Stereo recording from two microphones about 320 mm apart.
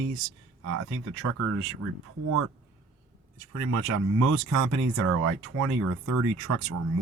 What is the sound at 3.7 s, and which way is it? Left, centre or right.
Speech, right.